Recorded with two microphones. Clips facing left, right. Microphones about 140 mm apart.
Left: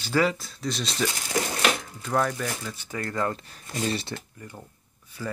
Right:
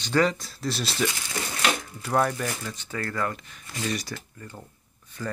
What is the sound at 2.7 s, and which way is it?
Speech, 15° left (ahead or behind).